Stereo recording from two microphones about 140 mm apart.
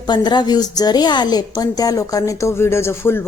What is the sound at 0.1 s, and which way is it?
A woman's voice, 30° left (ahead or behind).